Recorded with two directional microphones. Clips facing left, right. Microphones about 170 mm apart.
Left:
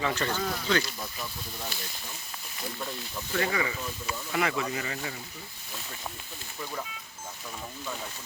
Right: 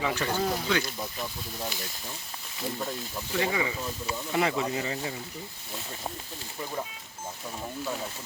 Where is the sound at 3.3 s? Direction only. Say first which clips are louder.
Right 1 dB; 20° right (ahead or behind).